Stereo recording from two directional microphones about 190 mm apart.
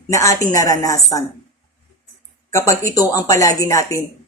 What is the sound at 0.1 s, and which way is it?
Speech, 15° left (ahead or behind).